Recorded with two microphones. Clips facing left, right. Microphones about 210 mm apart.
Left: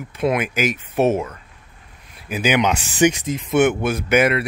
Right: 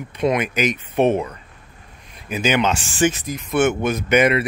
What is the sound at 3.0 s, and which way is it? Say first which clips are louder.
Speech: left 4 dB; 20° left (ahead or behind).